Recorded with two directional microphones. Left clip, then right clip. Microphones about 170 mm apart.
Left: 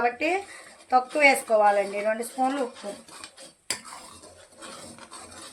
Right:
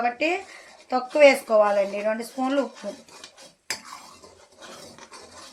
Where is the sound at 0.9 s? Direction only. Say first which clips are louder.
Right 3 dB; 35° right (ahead or behind).